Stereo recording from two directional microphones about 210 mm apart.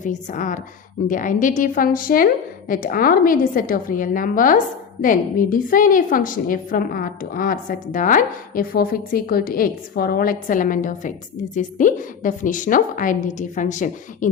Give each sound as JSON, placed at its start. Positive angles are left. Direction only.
{"t": 0.0, "sound": "a woman's voice", "side_deg": 35}